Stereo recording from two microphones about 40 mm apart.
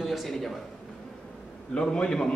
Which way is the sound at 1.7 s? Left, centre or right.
Left.